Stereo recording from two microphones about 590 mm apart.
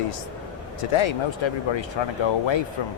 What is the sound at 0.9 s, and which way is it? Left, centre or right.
Speech, left.